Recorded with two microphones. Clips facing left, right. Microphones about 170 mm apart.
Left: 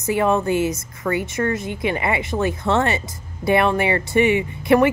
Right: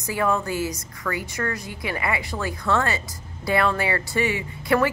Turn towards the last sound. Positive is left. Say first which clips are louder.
# left 6 dB
turn(degrees=20)  # may be behind; listen again after turning